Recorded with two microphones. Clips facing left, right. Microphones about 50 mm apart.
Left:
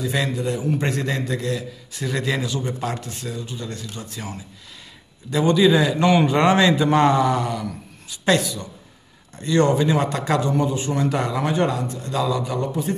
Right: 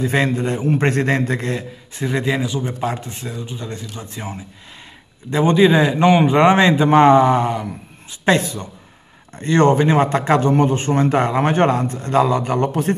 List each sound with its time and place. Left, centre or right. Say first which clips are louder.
0.0 s a man's voice: right 5 dB; right